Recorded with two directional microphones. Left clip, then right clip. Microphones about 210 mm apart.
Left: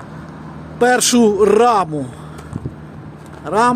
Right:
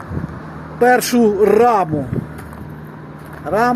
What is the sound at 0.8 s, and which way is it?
Speech, 5° left (ahead or behind).